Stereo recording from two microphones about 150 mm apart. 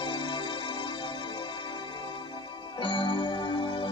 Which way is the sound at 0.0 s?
35° left (ahead or behind).